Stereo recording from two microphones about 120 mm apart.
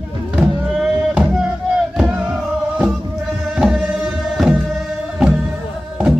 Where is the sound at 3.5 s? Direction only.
5° right (ahead or behind).